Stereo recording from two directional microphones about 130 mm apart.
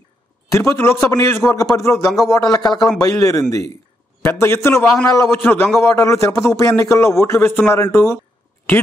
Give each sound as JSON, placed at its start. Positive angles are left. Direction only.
{"t": 0.5, "sound": "a man's voice", "side_deg": 20}